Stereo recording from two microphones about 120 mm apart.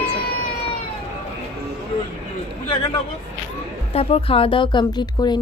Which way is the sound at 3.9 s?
55° left (ahead or behind).